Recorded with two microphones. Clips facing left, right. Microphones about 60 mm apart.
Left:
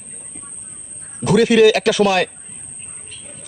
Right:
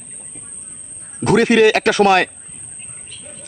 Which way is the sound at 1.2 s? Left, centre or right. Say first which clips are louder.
Even; right.